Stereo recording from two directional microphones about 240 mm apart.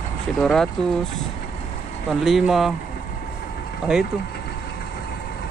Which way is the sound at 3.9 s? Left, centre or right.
Centre.